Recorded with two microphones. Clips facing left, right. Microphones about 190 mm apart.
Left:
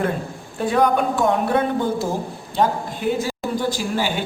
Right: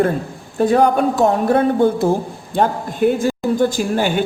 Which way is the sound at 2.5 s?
50° right (ahead or behind).